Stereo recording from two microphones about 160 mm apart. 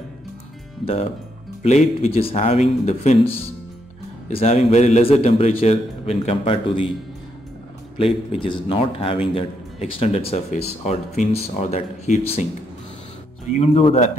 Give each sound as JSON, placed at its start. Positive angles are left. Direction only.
{"t": 0.8, "sound": "a man's voice", "side_deg": 35}
{"t": 8.0, "sound": "a man's voice", "side_deg": 35}
{"t": 13.5, "sound": "speech", "side_deg": 45}